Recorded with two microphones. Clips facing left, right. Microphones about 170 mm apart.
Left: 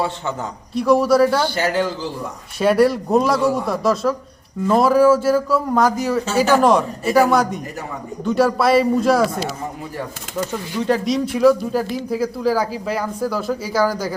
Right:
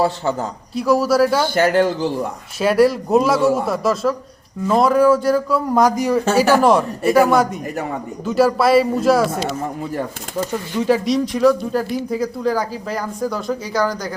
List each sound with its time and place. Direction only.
0.0 s a man's voice: 35° right (ahead or behind)
0.7 s speech: centre (ahead or behind)
1.5 s speech: 55° right (ahead or behind)
2.6 s speech: centre (ahead or behind)
5.7 s speech: 15° right (ahead or behind)
10.5 s speech: 5° right (ahead or behind)